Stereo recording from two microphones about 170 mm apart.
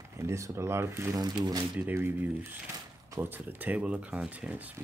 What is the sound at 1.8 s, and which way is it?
Speech, 10° right (ahead or behind).